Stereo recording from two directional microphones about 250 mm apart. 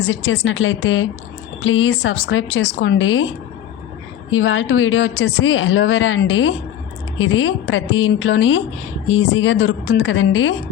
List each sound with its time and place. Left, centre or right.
0.0 s speech: left
4.3 s speech: left